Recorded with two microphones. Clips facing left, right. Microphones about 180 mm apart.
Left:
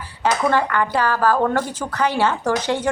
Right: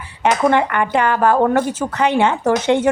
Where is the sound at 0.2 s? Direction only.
20° right (ahead or behind).